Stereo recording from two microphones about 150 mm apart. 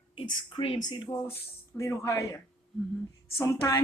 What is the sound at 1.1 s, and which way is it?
Speech, 20° left (ahead or behind).